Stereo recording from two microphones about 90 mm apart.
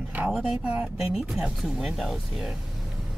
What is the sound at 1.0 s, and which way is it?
Speech, 5° right (ahead or behind).